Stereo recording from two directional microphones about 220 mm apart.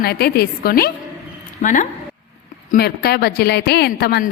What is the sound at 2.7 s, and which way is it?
A woman's voice, 45° left (ahead or behind).